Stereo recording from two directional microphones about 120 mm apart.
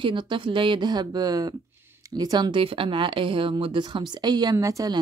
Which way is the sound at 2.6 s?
45° right (ahead or behind).